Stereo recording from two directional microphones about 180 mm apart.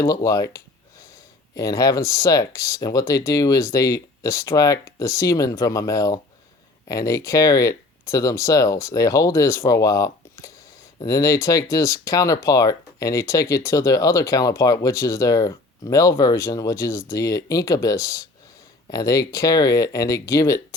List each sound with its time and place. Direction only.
0.0 s speech: 20° left (ahead or behind)
1.5 s speech: 20° left (ahead or behind)